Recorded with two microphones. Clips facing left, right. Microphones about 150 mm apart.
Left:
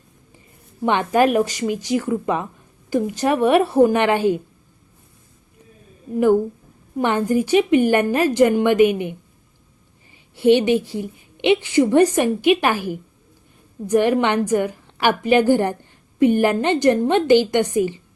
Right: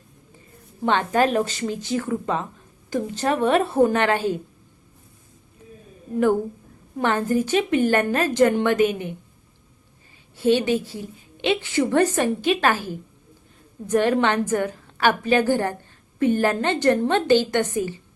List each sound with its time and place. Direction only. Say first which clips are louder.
0.9 s a woman's voice: left 3 dB; 15° left (ahead or behind)
6.9 s a woman's voice: left 3 dB; 15° left (ahead or behind)
10.3 s a woman's voice: left 5 dB; 15° left (ahead or behind)